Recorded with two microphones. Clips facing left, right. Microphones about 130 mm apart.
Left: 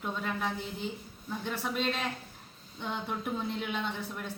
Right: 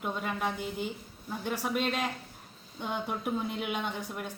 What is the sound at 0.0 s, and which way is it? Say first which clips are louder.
A woman's voice: right 1 dB; 10° right (ahead or behind).